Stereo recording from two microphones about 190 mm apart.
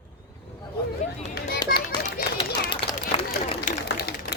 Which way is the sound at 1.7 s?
50° left (ahead or behind).